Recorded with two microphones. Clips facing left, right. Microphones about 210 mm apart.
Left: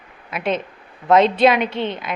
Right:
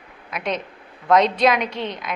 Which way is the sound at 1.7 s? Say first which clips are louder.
Left 4 dB; 30° left (ahead or behind).